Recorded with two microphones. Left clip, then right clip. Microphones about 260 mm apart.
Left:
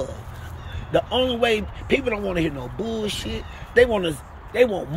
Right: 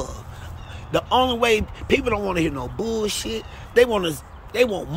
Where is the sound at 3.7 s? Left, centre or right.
Centre.